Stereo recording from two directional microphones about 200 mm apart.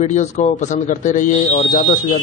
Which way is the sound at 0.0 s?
35° left (ahead or behind).